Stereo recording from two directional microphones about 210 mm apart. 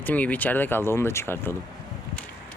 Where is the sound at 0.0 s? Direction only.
5° left (ahead or behind).